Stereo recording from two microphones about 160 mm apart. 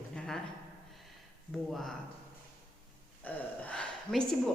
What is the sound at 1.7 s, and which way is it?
Speech, centre (ahead or behind).